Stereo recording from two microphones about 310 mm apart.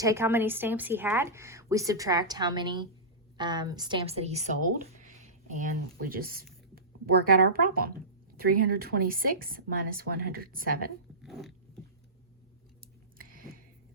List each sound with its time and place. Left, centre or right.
0.0 s speech: centre; by 10.8 s right
11.2 s dog: centre
13.1 s a sound: right